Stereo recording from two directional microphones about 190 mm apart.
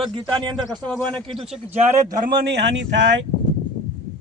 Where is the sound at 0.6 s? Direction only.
Centre (ahead or behind).